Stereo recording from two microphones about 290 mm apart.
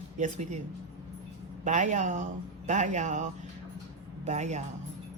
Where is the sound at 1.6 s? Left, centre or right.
Right.